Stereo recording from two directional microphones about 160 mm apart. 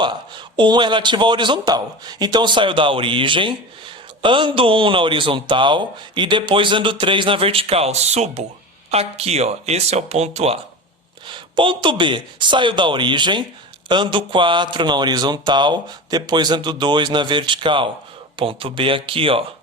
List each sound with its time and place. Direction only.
0.0 s a man's voice: 30° right (ahead or behind)
11.3 s a man's voice: 30° right (ahead or behind)